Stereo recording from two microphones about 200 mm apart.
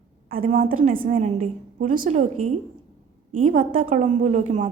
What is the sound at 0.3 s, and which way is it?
A woman's voice, 45° right (ahead or behind).